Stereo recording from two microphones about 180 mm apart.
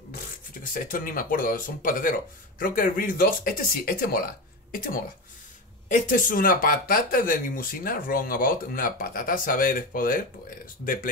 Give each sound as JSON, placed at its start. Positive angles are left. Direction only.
{"t": 0.7, "sound": "speech", "side_deg": 50}
{"t": 5.9, "sound": "speech", "side_deg": 45}